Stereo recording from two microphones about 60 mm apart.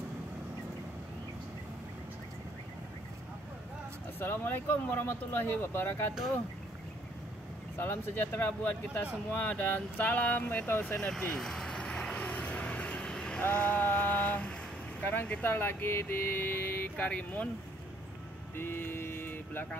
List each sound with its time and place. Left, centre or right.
4.2 s speech: left
7.7 s speech: left
11.0 s vehicle: centre
13.4 s speech: left
15.4 s speech: left
18.6 s speech: left